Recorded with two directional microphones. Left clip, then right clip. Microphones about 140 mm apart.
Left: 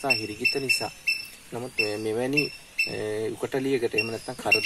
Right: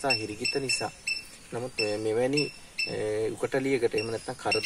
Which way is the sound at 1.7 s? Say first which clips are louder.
Left 1 dB; 20° left (ahead or behind).